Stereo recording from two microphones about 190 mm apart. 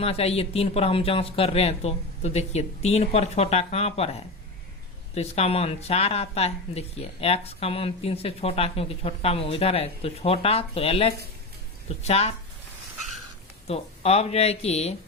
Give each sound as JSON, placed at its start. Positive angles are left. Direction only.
{"t": 0.0, "sound": "speech", "side_deg": 30}
{"t": 5.1, "sound": "speech", "side_deg": 35}
{"t": 13.7, "sound": "speech", "side_deg": 35}